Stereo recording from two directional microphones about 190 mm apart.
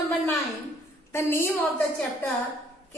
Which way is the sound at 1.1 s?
15° left (ahead or behind).